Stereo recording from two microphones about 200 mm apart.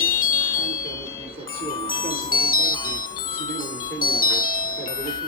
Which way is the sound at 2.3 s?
45° left (ahead or behind).